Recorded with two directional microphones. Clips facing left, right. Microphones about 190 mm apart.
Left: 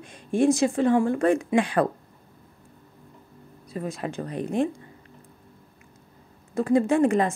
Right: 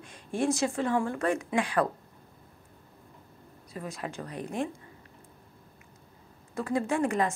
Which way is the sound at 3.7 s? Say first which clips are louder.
Left 6 dB; 30° left (ahead or behind).